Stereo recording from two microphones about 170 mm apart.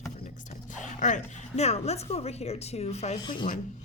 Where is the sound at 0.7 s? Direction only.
45° left (ahead or behind).